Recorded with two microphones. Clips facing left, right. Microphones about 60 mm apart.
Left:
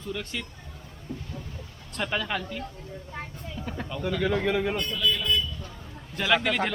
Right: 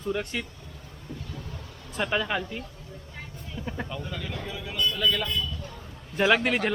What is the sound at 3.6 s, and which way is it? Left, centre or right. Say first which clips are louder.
Vehicle: right 1 dB; centre.